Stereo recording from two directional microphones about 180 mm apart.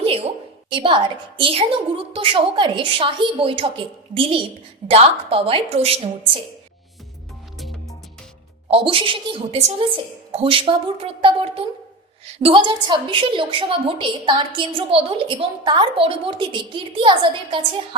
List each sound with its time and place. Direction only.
0.0 s a sound: 30° right (ahead or behind)
0.7 s a woman's voice: 30° right (ahead or behind)
7.6 s music: centre (ahead or behind)
8.7 s a woman's voice: 30° right (ahead or behind)